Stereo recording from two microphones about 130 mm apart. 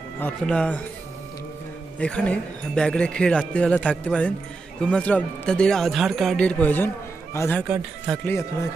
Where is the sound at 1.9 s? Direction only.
10° left (ahead or behind).